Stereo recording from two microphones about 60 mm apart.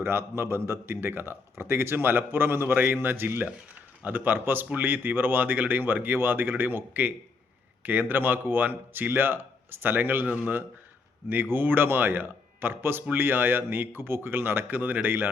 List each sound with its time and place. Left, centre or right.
0.0 s a man's voice: right